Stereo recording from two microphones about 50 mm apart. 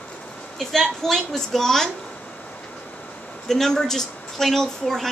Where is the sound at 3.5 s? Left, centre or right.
Centre.